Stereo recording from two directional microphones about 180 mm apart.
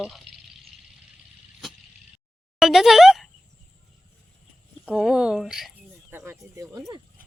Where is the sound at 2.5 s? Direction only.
Centre (ahead or behind).